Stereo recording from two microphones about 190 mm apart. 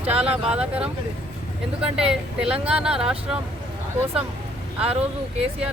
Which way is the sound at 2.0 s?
5° right (ahead or behind).